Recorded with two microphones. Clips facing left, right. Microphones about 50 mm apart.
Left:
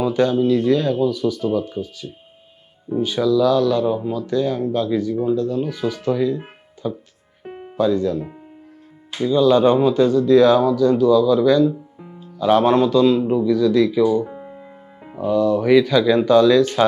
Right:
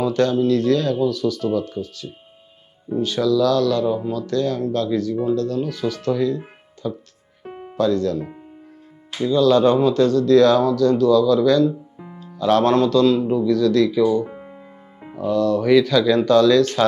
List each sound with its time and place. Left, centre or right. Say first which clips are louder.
0.0 s speech: left 1 dB; centre
9.0 s music: left 1 dB; centre
9.3 s speech: left 1 dB; centre